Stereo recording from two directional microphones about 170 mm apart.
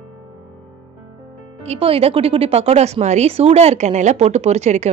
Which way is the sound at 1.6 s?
35° right (ahead or behind).